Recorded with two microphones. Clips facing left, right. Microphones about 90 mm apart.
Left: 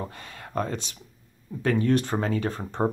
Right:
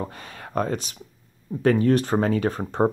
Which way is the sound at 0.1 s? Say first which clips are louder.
Right 3 dB; 30° right (ahead or behind).